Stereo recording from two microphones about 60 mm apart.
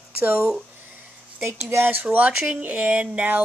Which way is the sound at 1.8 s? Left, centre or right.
Right.